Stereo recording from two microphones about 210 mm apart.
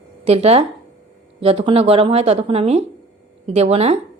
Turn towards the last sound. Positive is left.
turn(degrees=-30)  # may be behind; listen again after turning